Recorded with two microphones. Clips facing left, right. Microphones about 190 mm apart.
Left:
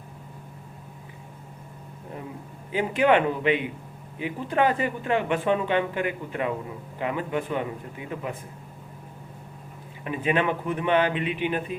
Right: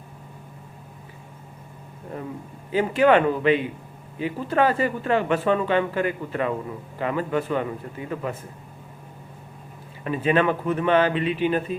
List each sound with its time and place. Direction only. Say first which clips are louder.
2.7 s speech: right 3 dB; 15° left (ahead or behind)
10.0 s speech: right 4 dB; 15° left (ahead or behind)